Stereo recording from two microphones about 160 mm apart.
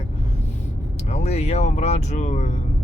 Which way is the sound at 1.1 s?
45° left (ahead or behind).